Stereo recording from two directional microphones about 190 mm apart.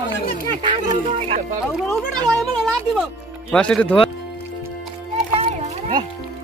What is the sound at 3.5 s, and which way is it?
Speech, 5° left (ahead or behind).